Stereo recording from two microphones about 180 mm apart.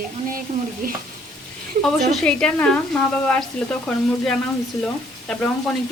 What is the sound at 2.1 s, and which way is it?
A woman's voice, 5° left (ahead or behind).